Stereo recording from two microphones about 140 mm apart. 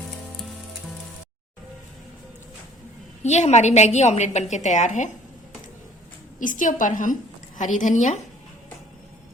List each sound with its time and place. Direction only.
3.2 s a woman's voice: 55° left (ahead or behind)
6.4 s a woman's voice: 70° left (ahead or behind)